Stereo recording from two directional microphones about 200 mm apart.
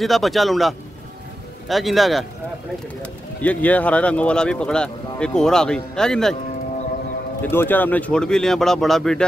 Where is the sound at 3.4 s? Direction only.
5° left (ahead or behind).